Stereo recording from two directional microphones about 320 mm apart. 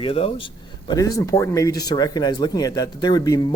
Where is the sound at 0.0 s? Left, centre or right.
Centre.